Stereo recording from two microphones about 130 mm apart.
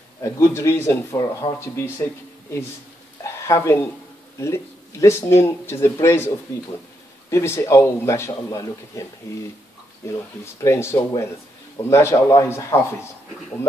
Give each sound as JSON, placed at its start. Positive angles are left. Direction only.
{"t": 0.2, "sound": "speech", "side_deg": 20}
{"t": 3.4, "sound": "speech", "side_deg": 25}